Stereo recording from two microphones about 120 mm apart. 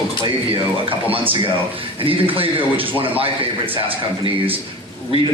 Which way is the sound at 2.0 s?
50° right (ahead or behind).